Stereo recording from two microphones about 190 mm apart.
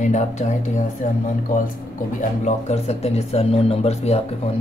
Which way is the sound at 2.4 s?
35° left (ahead or behind).